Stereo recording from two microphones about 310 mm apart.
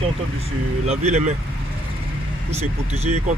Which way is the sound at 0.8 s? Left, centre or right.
Right.